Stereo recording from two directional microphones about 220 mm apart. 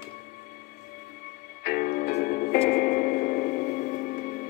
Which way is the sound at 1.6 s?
45° left (ahead or behind).